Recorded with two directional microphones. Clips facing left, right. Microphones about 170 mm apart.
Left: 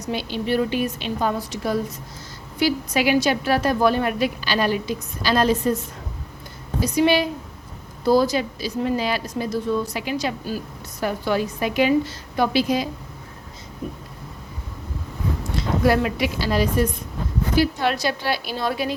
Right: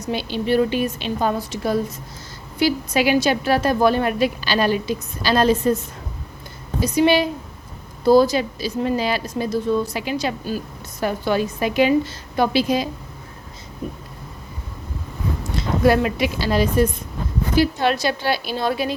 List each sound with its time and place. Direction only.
0.1 s a woman's voice: 30° right (ahead or behind)
15.5 s a woman's voice: 20° right (ahead or behind)